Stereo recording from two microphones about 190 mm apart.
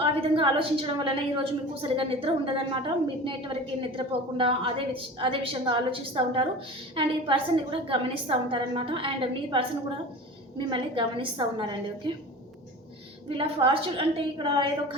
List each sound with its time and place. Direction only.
0.0 s a woman's voice: 30° right (ahead or behind)
10.7 s a woman's voice: 25° right (ahead or behind)
13.2 s a woman's voice: 25° right (ahead or behind)